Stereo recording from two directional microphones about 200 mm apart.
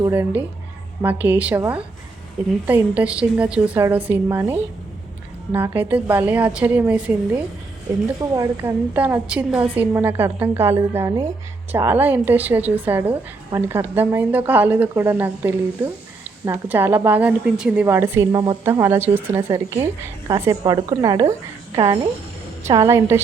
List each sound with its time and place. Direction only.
0.0 s speech: 10° right (ahead or behind)
18.3 s speech: 20° right (ahead or behind)
18.6 s speech: 10° right (ahead or behind)
22.6 s speech: 15° right (ahead or behind)